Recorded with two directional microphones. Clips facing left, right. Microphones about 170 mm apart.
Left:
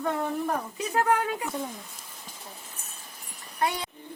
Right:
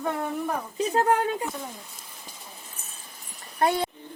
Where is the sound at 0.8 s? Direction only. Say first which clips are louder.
Right 4 dB; 30° right (ahead or behind).